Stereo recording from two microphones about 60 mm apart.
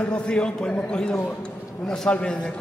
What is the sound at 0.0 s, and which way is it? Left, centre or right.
A man's voice, centre.